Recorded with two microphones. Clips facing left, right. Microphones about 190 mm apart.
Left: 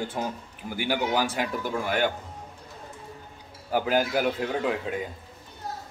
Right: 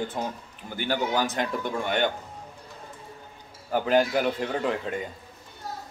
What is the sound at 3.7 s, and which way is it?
A man's voice, 5° left (ahead or behind).